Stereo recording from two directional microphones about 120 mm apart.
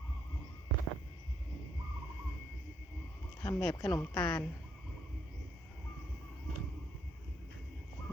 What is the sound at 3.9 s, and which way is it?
Speech, 30° left (ahead or behind).